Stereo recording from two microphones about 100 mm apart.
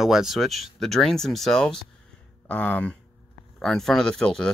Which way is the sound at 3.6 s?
5° left (ahead or behind).